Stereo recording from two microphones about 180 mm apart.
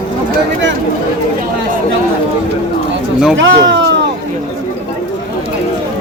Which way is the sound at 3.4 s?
85° right.